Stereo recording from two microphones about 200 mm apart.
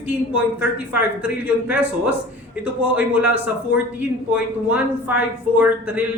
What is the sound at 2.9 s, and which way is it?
Speech, 10° right (ahead or behind).